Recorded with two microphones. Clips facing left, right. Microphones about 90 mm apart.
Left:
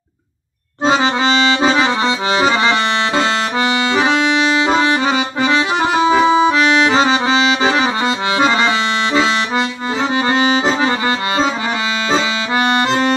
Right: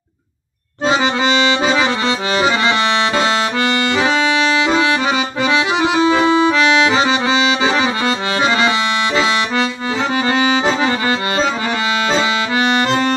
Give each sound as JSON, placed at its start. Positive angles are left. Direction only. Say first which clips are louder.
{"t": 2.0, "sound": "accordion", "louder": "left 1 dB", "side_deg": 25}
{"t": 4.6, "sound": "accordion", "louder": "left 1 dB", "side_deg": 25}
{"t": 6.1, "sound": "accordion", "louder": "left 1 dB", "side_deg": 15}
{"t": 6.9, "sound": "accordion", "louder": "left 1 dB", "side_deg": 30}
{"t": 12.1, "sound": "accordion", "louder": "even", "side_deg": 25}